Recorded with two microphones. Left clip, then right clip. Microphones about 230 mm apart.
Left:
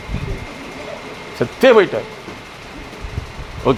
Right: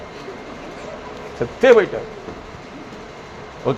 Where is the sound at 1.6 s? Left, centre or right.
Left.